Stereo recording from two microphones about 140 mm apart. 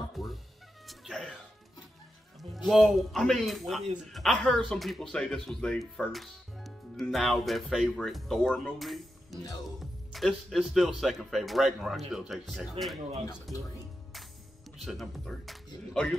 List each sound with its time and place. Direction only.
0.1 s music: centre (ahead or behind)
2.5 s speech: centre (ahead or behind)
13.3 s speech: 25° left (ahead or behind)
14.8 s speech: centre (ahead or behind)